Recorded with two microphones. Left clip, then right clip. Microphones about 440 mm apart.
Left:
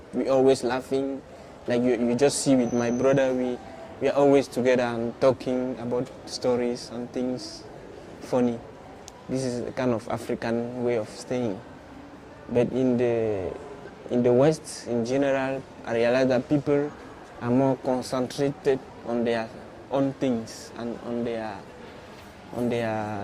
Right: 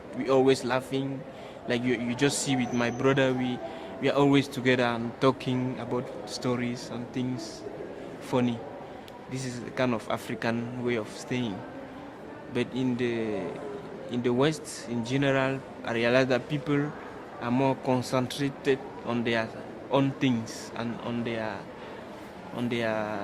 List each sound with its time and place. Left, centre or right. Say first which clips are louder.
0.3 s speech: left 2 dB; left
12.5 s speech: left 7 dB; left
22.7 s speech: even; left